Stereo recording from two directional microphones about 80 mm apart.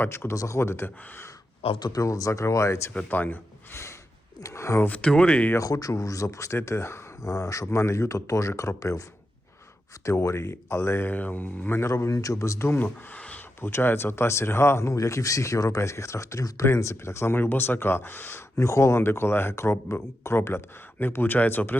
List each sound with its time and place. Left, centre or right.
0.0 s speech: left
1.8 s speech: left
2.9 s speech: centre
4.4 s speech: left
4.9 s speech: centre
5.5 s speech: left
10.1 s speech: left
11.9 s speech: left; by 13.4 s centre
13.6 s speech: left